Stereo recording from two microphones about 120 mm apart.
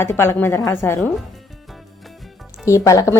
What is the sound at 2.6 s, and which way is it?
Speech, 25° left (ahead or behind).